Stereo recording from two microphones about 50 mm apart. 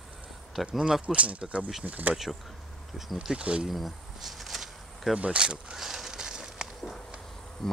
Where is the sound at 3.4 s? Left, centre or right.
Right.